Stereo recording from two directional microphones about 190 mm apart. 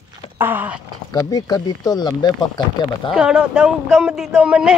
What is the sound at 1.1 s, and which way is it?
Speech, 20° left (ahead or behind).